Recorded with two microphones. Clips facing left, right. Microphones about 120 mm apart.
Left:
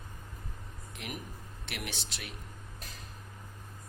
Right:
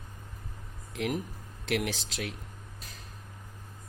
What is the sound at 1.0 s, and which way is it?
Speech, 90° right.